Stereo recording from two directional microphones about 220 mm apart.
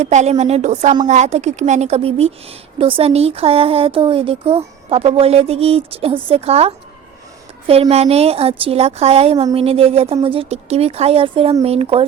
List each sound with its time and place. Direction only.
0.0 s a woman's voice: 30° right (ahead or behind)